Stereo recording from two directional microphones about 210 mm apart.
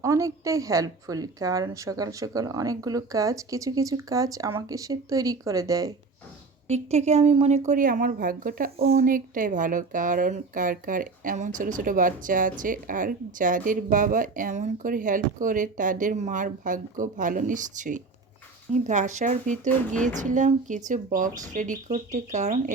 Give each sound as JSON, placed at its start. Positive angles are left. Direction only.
{"t": 0.0, "sound": "a woman's voice", "side_deg": -15}
{"t": 6.7, "sound": "speech", "side_deg": -30}